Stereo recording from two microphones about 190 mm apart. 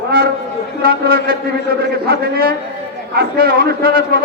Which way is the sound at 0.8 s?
50° right (ahead or behind).